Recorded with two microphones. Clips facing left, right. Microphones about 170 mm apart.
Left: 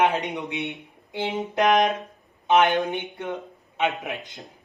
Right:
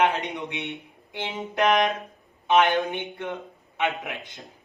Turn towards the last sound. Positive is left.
turn(degrees=20)  # may be behind; listen again after turning